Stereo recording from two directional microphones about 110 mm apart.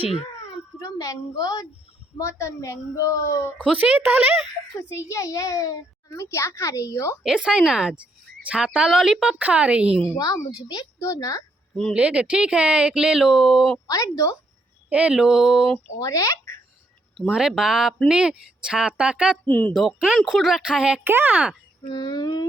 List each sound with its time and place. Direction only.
0.9 s a woman's voice: 30° left (ahead or behind)
3.6 s speech: 10° right (ahead or behind)
4.9 s a child's voice: 25° left (ahead or behind)
7.2 s speech: 5° right (ahead or behind)
10.2 s a child's voice: 35° left (ahead or behind)
11.9 s speech: 10° right (ahead or behind)
13.8 s a child's voice: 30° left (ahead or behind)
14.8 s speech: 10° right (ahead or behind)
16.0 s speech: 30° left (ahead or behind)
17.2 s speech: 5° right (ahead or behind)
19.5 s speech: 15° left (ahead or behind)
19.7 s speech: centre (ahead or behind)
21.8 s a child's voice: 40° left (ahead or behind)